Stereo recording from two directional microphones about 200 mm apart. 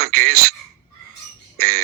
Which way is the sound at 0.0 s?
50° right (ahead or behind).